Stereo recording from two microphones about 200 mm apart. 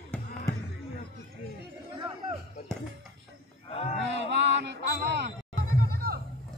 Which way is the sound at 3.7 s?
30° left (ahead or behind).